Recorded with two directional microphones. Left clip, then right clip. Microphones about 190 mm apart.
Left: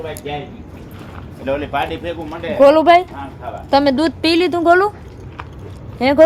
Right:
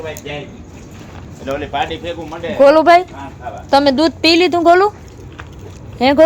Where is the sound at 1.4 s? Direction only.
40° left (ahead or behind).